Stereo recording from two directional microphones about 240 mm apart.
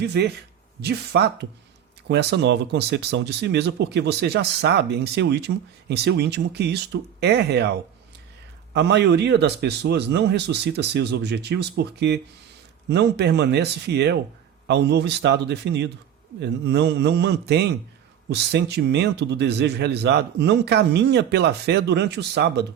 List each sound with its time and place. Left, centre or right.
0.0 s a man's voice: right